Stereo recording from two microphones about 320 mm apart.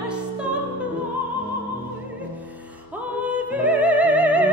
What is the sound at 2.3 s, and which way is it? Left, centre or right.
Opera, centre.